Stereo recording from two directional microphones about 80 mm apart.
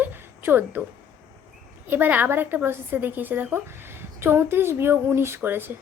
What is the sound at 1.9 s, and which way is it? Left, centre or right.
A woman's voice, right.